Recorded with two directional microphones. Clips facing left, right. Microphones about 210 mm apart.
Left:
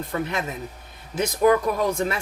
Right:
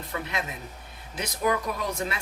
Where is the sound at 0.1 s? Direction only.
45° left (ahead or behind).